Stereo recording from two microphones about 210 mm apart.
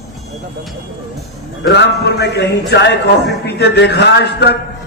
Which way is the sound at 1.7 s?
55° left (ahead or behind).